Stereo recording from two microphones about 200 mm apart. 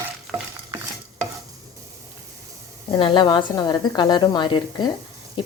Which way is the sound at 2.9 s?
20° left (ahead or behind).